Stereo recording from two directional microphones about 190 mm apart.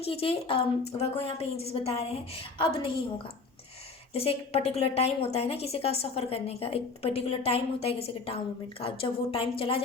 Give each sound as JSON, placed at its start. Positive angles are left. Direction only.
{"t": 0.0, "sound": "a woman's voice", "side_deg": 30}
{"t": 4.1, "sound": "a woman's voice", "side_deg": 30}